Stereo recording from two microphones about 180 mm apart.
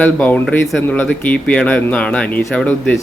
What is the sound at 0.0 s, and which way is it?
Speech, 10° left (ahead or behind).